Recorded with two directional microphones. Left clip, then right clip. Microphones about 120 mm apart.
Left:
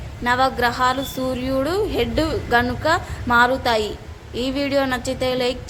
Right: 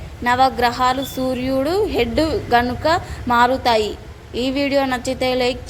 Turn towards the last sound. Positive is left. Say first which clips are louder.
# right 2 dB
turn(degrees=-25)  # may be behind; listen again after turning